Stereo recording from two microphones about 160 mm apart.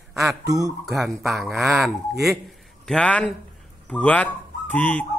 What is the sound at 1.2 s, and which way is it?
Speech, centre (ahead or behind).